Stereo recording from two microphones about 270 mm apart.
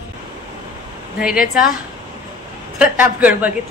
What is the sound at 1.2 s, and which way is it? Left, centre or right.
Speech, centre.